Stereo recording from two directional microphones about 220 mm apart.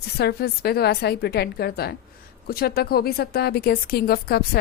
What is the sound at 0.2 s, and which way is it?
Speech, 45° left (ahead or behind).